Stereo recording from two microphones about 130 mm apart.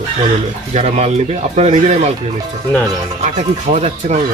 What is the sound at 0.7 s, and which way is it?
Speech, 60° right (ahead or behind).